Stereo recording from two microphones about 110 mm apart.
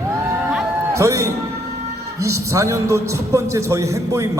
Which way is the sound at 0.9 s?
30° right (ahead or behind).